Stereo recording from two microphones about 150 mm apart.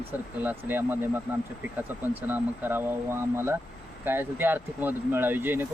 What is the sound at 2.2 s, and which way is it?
Speech, 15° right (ahead or behind).